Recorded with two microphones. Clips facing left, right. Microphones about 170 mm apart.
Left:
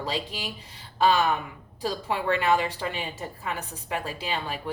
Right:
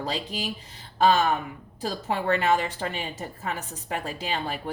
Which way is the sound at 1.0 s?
40° right (ahead or behind).